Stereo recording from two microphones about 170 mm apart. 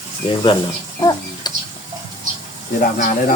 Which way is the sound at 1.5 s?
25° left (ahead or behind).